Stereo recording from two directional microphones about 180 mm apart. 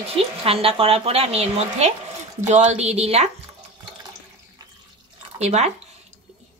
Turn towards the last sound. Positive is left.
turn(degrees=-40)  # may be behind; listen again after turning